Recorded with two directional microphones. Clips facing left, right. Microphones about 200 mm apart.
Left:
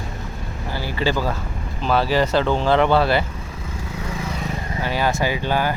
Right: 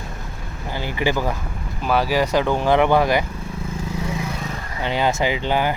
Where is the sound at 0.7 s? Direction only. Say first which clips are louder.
Even; 20° right (ahead or behind).